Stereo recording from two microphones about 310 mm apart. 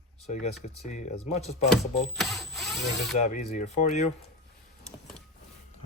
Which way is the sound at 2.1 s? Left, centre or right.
Centre.